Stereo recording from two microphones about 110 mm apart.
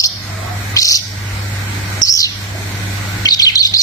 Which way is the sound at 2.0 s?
30° left (ahead or behind).